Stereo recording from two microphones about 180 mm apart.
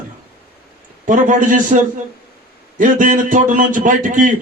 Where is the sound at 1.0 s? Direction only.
45° right (ahead or behind).